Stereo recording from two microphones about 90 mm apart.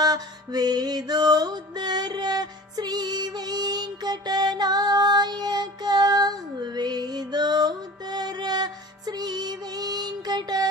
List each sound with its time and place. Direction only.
0.0 s music: 45° right (ahead or behind)